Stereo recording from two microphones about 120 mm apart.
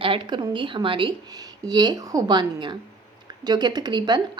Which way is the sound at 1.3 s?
35° right (ahead or behind).